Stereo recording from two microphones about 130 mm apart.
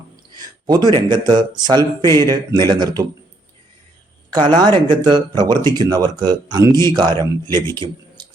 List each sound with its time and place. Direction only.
0.3 s speech: 30° right (ahead or behind)
4.3 s speech: 35° right (ahead or behind)
7.4 s speech: 20° left (ahead or behind)